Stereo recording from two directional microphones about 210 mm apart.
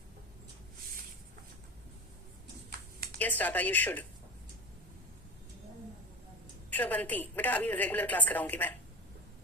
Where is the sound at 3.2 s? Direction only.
10° left (ahead or behind).